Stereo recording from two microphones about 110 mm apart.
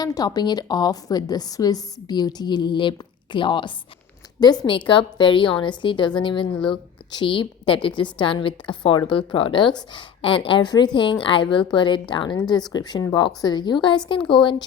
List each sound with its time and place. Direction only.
0.0 s a woman's voice: 35° left (ahead or behind)
6.5 s speech: 5° left (ahead or behind)
7.1 s a woman's voice: 50° left (ahead or behind)